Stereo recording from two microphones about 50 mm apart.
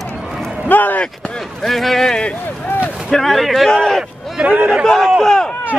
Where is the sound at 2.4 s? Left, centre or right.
Left.